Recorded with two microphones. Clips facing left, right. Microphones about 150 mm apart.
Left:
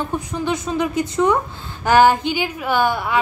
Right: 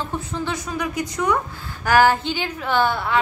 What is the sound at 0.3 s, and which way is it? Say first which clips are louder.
A woman's voice: left 4 dB; 20° left (ahead or behind).